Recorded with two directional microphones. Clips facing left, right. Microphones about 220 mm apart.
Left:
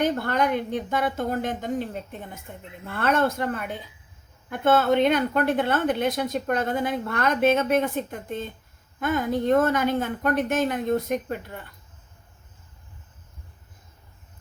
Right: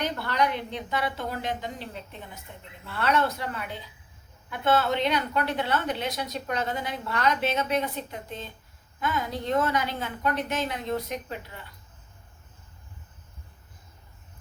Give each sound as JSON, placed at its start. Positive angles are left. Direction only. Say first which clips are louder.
{"t": 0.0, "sound": "a woman's voice", "louder": "left 4 dB", "side_deg": 50}